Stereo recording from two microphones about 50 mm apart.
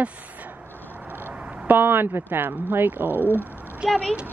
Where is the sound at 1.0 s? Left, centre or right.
Right.